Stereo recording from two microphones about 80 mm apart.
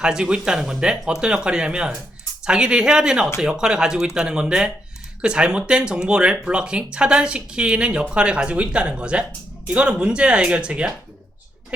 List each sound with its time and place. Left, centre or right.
0.0 s speech: centre